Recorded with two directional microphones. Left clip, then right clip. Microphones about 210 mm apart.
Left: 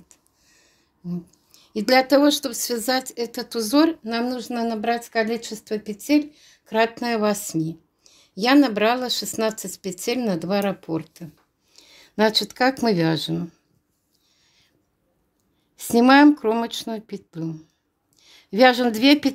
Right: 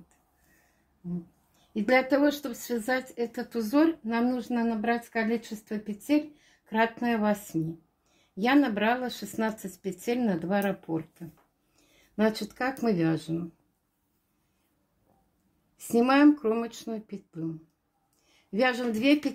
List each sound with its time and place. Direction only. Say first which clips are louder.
1.7 s speech: left 7 dB; 60° left (ahead or behind)
15.7 s speech: left 8 dB; 50° left (ahead or behind)
18.5 s speech: left 10 dB; 50° left (ahead or behind)